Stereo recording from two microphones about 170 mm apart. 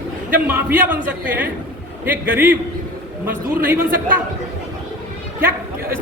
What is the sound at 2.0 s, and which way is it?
Speech, 10° right (ahead or behind).